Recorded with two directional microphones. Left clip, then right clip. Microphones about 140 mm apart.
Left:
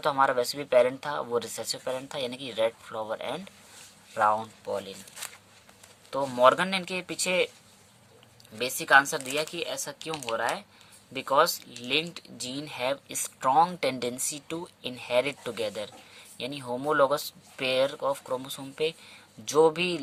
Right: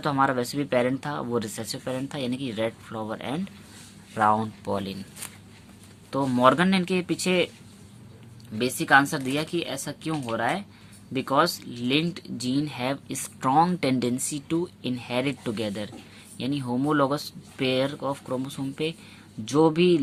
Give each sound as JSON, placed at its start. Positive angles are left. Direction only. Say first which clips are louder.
{"t": 0.0, "sound": "speech", "louder": "even", "side_deg": 30}
{"t": 4.1, "sound": "speech", "louder": "right 2 dB", "side_deg": 15}
{"t": 4.6, "sound": "speech", "louder": "right 3 dB", "side_deg": -5}
{"t": 6.1, "sound": "speech", "louder": "right 1 dB", "side_deg": 20}
{"t": 8.5, "sound": "speech", "louder": "right 1 dB", "side_deg": 30}